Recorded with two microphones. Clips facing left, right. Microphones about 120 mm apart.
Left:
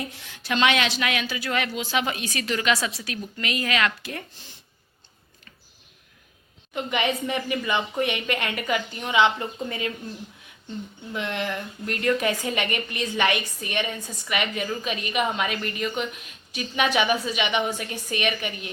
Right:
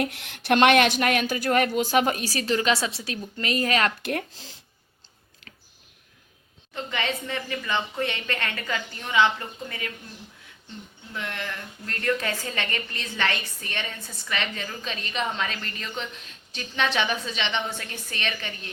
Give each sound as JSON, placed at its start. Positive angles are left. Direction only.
{"t": 0.0, "sound": "a woman's voice", "side_deg": -70}
{"t": 4.0, "sound": "speech", "side_deg": -80}
{"t": 6.7, "sound": "a woman's voice", "side_deg": 15}
{"t": 11.1, "sound": "a woman's voice", "side_deg": 20}